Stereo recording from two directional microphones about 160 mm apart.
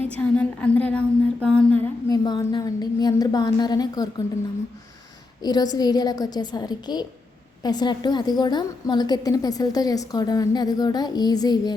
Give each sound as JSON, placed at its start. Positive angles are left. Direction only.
{"t": 0.2, "sound": "a sound", "side_deg": 10}
{"t": 2.0, "sound": "a woman's voice", "side_deg": 25}
{"t": 5.4, "sound": "a woman's voice", "side_deg": 25}